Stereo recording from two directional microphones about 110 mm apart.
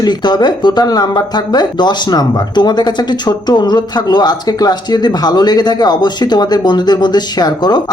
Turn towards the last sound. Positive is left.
turn(degrees=40)  # may be behind; listen again after turning